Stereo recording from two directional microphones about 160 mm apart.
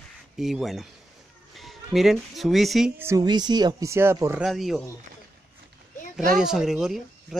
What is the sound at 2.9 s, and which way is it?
Speech, 15° right (ahead or behind).